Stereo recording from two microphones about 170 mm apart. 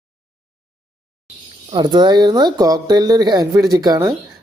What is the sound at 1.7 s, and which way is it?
A woman's voice, 25° right (ahead or behind).